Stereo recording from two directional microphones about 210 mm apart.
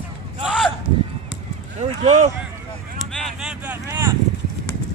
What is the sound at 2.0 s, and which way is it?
Speech, 35° right (ahead or behind).